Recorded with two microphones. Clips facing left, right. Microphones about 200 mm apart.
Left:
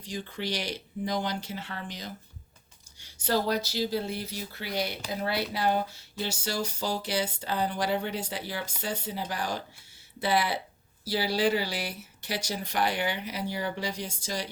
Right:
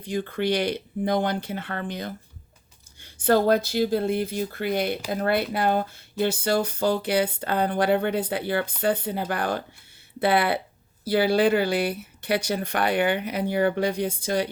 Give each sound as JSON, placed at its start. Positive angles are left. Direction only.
{"t": 0.0, "sound": "speech", "side_deg": -55}